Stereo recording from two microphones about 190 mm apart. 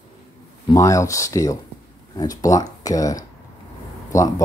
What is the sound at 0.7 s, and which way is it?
Speech, 15° left (ahead or behind).